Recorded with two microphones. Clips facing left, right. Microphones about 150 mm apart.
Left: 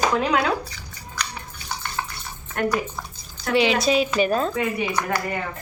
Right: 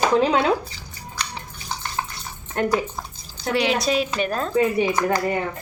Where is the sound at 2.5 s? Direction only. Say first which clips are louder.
Right 2 dB; 25° right (ahead or behind).